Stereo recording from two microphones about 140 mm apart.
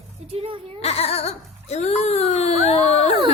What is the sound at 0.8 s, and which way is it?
Child singing, 50° left (ahead or behind).